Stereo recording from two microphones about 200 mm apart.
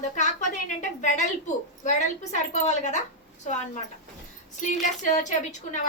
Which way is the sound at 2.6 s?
35° left (ahead or behind).